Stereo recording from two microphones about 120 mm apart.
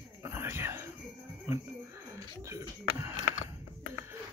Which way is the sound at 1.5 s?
25° right (ahead or behind).